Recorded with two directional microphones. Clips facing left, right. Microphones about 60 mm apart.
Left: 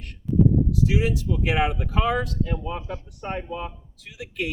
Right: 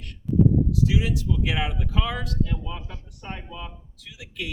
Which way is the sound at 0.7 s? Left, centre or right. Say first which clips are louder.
Left 1 dB; left.